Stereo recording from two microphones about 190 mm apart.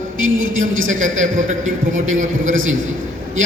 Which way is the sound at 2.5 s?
90° right.